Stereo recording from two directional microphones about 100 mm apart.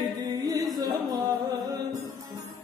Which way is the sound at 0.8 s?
40° right (ahead or behind).